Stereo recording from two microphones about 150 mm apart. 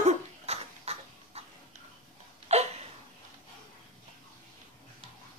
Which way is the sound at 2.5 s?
45° right (ahead or behind).